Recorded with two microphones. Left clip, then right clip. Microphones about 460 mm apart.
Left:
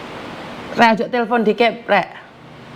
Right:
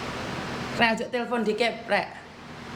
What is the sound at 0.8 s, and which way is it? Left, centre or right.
A woman's voice, left.